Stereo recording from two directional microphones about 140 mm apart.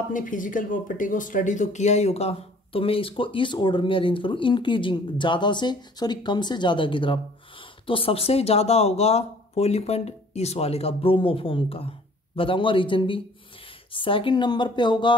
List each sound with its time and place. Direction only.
0.1 s speech: 70° left (ahead or behind); by 15.1 s 35° left (ahead or behind)